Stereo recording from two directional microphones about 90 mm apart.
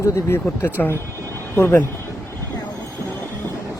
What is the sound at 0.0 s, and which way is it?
Speech, 25° left (ahead or behind).